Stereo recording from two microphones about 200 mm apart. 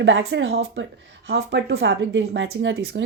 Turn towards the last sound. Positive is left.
turn(degrees=-65)  # may be behind; listen again after turning